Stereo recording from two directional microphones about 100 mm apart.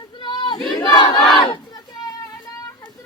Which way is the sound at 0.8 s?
40° left (ahead or behind).